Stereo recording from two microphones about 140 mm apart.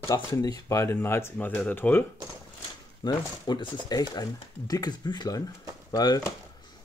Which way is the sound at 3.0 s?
30° left (ahead or behind).